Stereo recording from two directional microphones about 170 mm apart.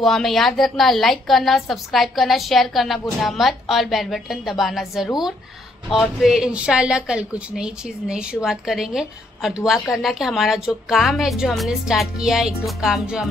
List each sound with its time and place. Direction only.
0.0 s a woman's voice: centre (ahead or behind)